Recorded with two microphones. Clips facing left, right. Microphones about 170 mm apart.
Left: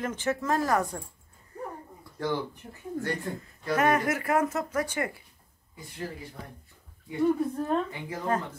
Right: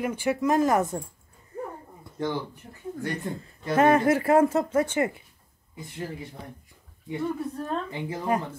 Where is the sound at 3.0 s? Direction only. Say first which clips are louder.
Right 3 dB; 25° right (ahead or behind).